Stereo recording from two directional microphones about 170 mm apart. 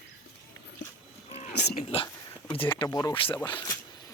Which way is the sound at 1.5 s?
75° left (ahead or behind).